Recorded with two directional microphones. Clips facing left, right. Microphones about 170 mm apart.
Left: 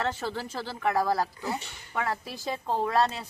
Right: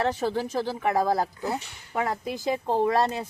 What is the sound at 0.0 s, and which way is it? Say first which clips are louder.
Speech: right 5 dB; 15° right (ahead or behind).